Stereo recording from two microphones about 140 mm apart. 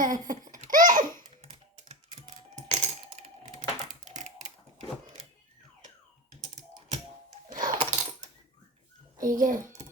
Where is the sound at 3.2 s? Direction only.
55° right (ahead or behind).